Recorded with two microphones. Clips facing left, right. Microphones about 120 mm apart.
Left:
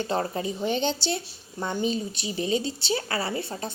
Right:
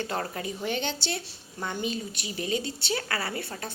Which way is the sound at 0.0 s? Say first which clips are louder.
Left 4 dB; 25° left (ahead or behind).